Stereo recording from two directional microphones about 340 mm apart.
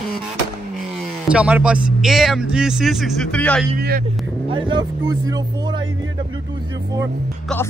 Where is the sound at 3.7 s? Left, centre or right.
Right.